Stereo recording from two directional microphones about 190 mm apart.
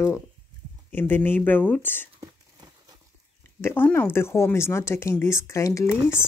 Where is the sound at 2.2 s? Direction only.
20° right (ahead or behind).